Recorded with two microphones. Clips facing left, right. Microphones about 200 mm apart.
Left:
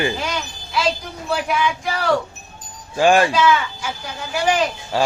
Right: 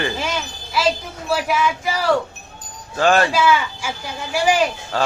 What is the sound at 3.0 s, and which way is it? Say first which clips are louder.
Speech: left 2 dB; 10° left (ahead or behind).